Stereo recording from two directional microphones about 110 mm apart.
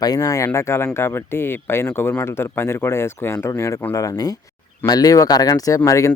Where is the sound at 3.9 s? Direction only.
30° left (ahead or behind).